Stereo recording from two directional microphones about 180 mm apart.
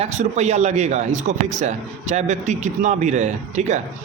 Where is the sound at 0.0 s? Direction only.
40° right (ahead or behind).